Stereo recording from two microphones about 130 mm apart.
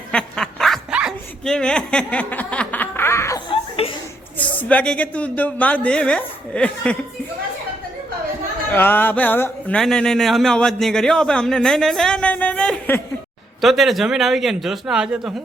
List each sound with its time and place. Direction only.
0.1 s duck: 5° left (ahead or behind)
1.5 s snicker: 5° left (ahead or behind); by 3.4 s 20° left (ahead or behind)
3.5 s a sound: 45° left (ahead or behind)
4.4 s speech: 10° left (ahead or behind)
8.7 s a man's voice: 15° left (ahead or behind); by 15.3 s 5° right (ahead or behind)